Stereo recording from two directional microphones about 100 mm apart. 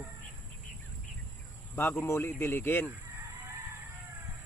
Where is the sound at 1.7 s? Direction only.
25° left (ahead or behind).